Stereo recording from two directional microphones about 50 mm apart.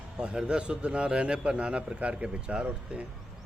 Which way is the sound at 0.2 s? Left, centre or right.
Centre.